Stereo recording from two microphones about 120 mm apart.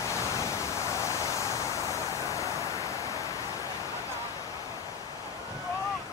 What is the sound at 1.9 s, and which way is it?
Vehicle, 25° left (ahead or behind).